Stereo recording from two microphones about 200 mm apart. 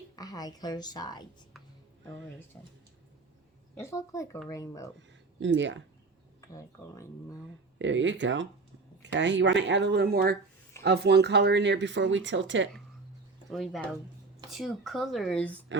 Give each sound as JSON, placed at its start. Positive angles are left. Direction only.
{"t": 0.2, "sound": "speech", "side_deg": 20}
{"t": 3.8, "sound": "speech", "side_deg": 15}
{"t": 5.4, "sound": "speech", "side_deg": -65}
{"t": 6.5, "sound": "speech", "side_deg": 15}
{"t": 7.8, "sound": "speech", "side_deg": -65}
{"t": 13.5, "sound": "speech", "side_deg": 0}